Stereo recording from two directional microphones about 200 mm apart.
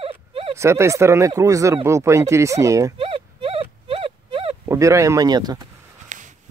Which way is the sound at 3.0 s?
25° right (ahead or behind).